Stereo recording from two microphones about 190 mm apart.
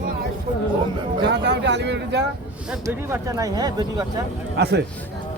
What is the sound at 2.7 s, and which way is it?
Speech, 10° right (ahead or behind).